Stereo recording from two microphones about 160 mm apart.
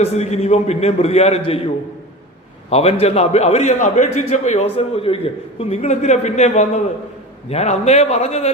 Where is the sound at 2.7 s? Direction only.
40° left (ahead or behind).